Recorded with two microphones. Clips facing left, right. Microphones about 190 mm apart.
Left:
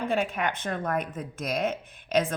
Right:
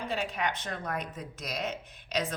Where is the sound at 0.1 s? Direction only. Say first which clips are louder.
Left 2 dB; 50° left (ahead or behind).